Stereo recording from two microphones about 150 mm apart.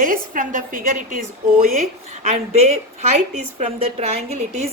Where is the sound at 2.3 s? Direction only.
45° right (ahead or behind).